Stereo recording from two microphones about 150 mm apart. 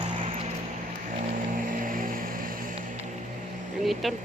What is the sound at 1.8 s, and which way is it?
Vehicle, 65° right (ahead or behind).